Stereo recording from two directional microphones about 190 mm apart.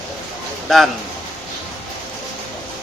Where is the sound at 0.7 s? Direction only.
Centre (ahead or behind).